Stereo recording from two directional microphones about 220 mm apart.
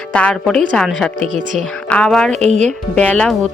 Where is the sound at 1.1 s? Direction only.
35° right (ahead or behind).